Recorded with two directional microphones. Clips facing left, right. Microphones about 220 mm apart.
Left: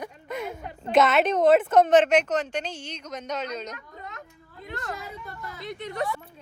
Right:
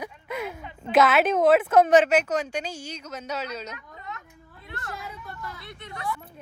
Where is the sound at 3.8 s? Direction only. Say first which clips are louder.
Right 1 dB; 45° left (ahead or behind).